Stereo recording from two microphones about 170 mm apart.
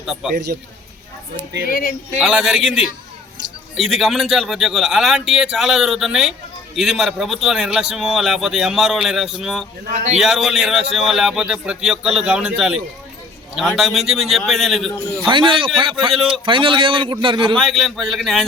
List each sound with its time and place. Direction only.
0.0 s a man's voice: 5° right (ahead or behind)
1.6 s speech: 55° left (ahead or behind)
2.2 s a man's voice: 5° right (ahead or behind)
3.8 s a man's voice: centre (ahead or behind)
9.8 s speech: 45° right (ahead or behind)
10.2 s a man's voice: centre (ahead or behind)
15.3 s a man's voice: 30° right (ahead or behind)
17.5 s a man's voice: centre (ahead or behind)